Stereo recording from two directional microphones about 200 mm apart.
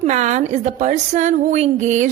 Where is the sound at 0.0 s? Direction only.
35° right (ahead or behind).